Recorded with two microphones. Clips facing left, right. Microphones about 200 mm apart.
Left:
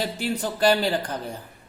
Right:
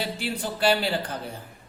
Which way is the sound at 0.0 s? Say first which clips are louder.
Left 3 dB; 40° left (ahead or behind).